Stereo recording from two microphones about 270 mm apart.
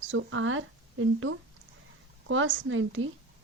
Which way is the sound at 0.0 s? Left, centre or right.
Right.